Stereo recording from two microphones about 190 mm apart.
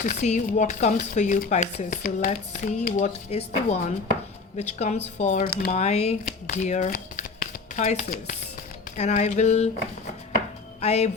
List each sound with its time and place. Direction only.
0.0 s speech: 40° left (ahead or behind)
10.8 s speech: 35° left (ahead or behind)